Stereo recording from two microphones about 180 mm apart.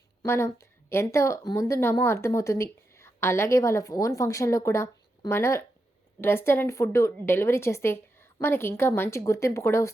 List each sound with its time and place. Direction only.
0.2 s a woman's voice: 15° left (ahead or behind)